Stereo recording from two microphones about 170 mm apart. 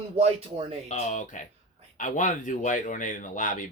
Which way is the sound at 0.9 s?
45° left (ahead or behind).